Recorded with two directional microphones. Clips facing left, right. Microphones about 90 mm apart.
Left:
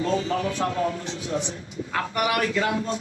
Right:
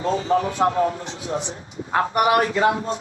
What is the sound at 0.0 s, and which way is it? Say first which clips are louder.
A man's voice: right 4 dB; 30° right (ahead or behind).